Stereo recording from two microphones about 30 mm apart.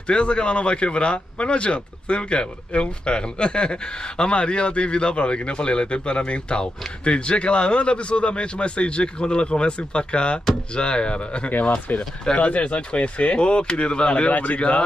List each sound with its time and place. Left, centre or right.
0.0 s speech: left
11.9 s speech: left
12.4 s speech: left
13.4 s speech: left
14.3 s speech: left